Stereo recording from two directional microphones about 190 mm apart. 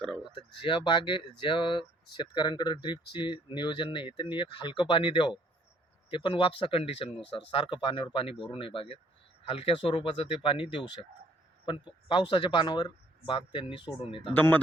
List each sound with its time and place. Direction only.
0.6 s speech: 25° left (ahead or behind)
14.3 s speech: 10° left (ahead or behind)